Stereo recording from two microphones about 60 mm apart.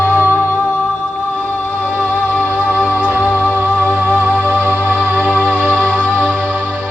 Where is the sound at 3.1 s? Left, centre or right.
Right.